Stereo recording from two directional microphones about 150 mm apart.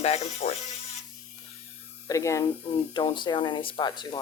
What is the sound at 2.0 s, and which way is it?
Speech, 20° left (ahead or behind).